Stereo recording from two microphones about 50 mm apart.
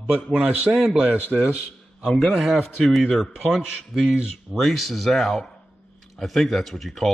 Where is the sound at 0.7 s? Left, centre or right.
Centre.